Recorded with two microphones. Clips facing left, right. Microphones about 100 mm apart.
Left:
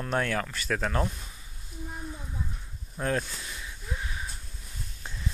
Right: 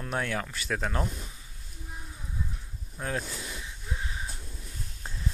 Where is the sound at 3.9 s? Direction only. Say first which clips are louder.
Even; 25° right (ahead or behind).